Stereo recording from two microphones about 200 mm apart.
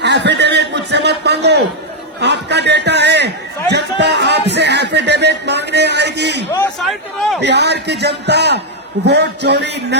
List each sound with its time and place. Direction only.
0.0 s a sound: 60° right (ahead or behind)
6.8 s a man's voice: centre (ahead or behind)
7.4 s a man's voice: 55° right (ahead or behind)